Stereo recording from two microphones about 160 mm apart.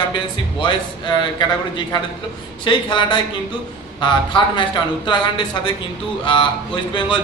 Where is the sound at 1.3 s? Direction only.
25° left (ahead or behind).